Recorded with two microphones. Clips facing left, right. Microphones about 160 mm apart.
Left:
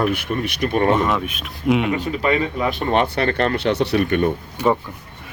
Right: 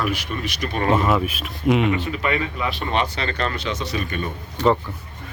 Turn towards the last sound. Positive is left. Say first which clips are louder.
# even
turn(degrees=10)  # may be behind; listen again after turning